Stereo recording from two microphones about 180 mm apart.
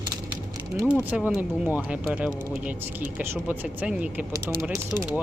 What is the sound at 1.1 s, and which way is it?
Speech, 10° right (ahead or behind).